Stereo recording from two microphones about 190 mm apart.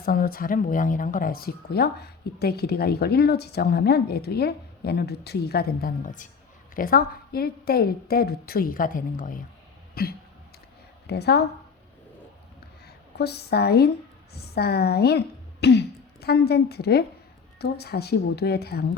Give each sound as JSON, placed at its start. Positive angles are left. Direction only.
{"t": 0.0, "sound": "a woman's voice", "side_deg": 50}
{"t": 9.9, "sound": "throat clearing", "side_deg": 55}
{"t": 11.0, "sound": "a woman's voice", "side_deg": 60}
{"t": 13.1, "sound": "speech", "side_deg": 60}